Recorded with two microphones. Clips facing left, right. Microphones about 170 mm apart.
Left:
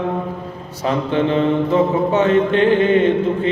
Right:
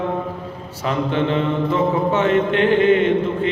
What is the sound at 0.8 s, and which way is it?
Mantra, 35° left (ahead or behind).